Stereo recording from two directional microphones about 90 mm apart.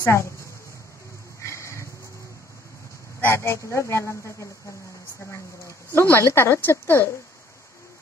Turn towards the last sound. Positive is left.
turn(degrees=25)  # may be behind; listen again after turning